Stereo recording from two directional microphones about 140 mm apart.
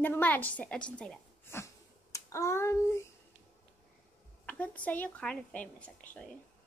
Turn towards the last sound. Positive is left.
turn(degrees=10)  # may be behind; listen again after turning